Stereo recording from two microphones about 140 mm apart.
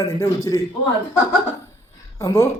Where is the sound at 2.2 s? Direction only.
25° left (ahead or behind).